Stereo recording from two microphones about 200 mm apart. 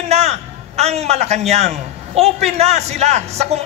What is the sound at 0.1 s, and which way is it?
A man's voice, 35° right (ahead or behind).